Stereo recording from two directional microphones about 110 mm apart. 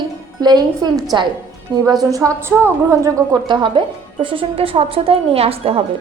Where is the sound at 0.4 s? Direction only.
35° right (ahead or behind).